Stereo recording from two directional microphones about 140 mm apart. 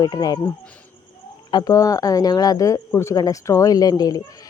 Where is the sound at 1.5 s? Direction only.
25° left (ahead or behind).